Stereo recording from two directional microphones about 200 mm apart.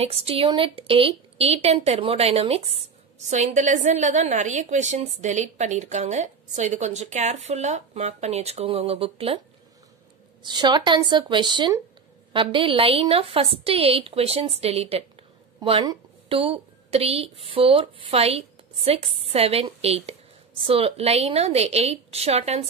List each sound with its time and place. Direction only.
0.0 s a woman's voice: 30° right (ahead or behind)
10.4 s a woman's voice: 20° right (ahead or behind)